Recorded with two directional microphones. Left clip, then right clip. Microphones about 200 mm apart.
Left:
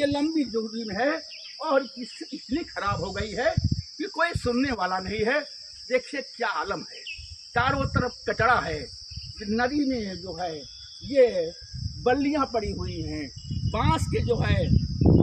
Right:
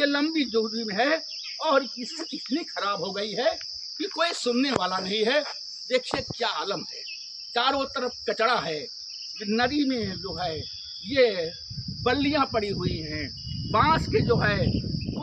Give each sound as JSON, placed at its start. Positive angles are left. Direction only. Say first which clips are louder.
{"t": 0.0, "sound": "speech", "louder": "right 1 dB", "side_deg": -10}
{"t": 9.8, "sound": "speech", "louder": "right 1 dB", "side_deg": -5}